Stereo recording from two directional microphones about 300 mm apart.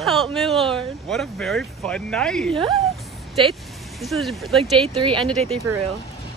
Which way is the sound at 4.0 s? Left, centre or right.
Centre.